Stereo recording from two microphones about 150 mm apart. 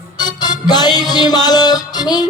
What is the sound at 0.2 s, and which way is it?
Music, 25° left (ahead or behind).